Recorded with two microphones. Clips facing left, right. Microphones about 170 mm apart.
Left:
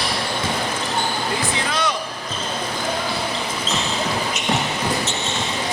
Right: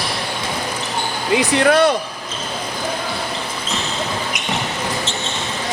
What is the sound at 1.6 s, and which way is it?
Speech, 60° right (ahead or behind).